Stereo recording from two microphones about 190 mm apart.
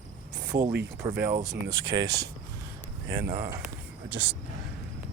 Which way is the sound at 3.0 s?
55° right (ahead or behind).